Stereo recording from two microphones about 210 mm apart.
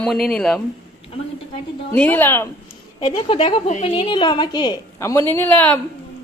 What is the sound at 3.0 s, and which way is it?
A woman's voice, 25° left (ahead or behind).